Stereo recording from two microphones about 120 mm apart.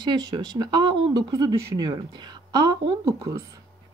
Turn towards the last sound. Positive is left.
turn(degrees=-30)  # may be behind; listen again after turning